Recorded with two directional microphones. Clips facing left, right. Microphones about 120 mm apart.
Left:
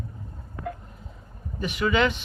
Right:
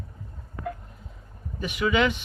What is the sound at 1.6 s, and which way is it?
Speech, 10° right (ahead or behind).